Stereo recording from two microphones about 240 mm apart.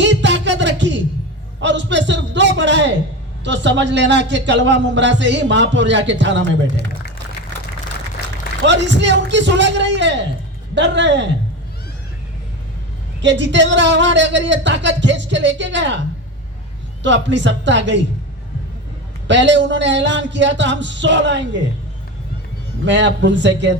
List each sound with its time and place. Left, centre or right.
0.0 s music: right
1.6 s a man's voice: right
8.6 s a man's voice: right
13.2 s a man's voice: right
19.3 s a man's voice: right
22.9 s a man's voice: right